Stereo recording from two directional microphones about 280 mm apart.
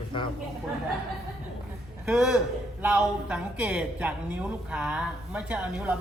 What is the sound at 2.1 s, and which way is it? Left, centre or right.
A woman's voice, centre.